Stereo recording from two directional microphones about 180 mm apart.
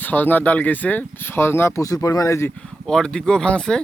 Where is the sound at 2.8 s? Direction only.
5° left (ahead or behind).